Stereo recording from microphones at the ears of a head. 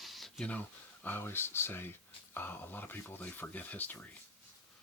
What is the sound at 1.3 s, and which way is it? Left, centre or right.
Speech, left.